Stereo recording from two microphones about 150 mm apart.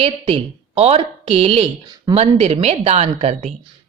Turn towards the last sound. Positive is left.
turn(degrees=-45)  # may be behind; listen again after turning